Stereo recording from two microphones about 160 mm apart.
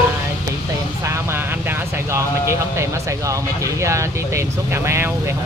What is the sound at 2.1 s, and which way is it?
Speech, 15° right (ahead or behind).